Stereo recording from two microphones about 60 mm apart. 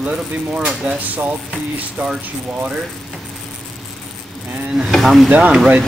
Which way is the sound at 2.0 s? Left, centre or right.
Right.